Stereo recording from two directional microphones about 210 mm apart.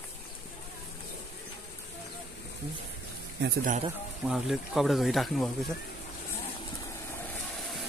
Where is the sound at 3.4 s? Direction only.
55° right (ahead or behind).